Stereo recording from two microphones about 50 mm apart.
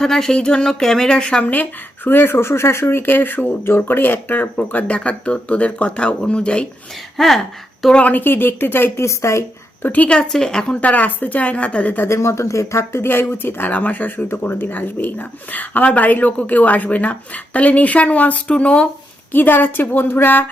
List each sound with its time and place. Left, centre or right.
0.0 s speech: centre
2.0 s speech: left
7.2 s a woman's voice: centre
8.0 s a woman's voice: left
9.0 s speech: left
9.8 s speech: left
10.1 s speech: centre
10.8 s a woman's voice: left
12.0 s speech: left
13.0 s a woman's voice: left
13.7 s speech: left
19.3 s a woman's voice: left